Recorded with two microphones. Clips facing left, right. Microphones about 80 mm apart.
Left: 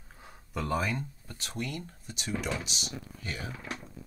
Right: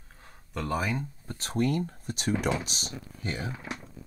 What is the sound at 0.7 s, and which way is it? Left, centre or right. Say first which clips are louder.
Speech: right 2 dB; centre.